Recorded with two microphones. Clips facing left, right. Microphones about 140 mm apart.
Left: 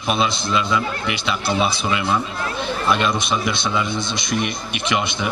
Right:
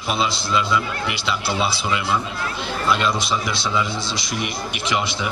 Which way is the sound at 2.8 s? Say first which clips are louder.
Even; 20° left (ahead or behind).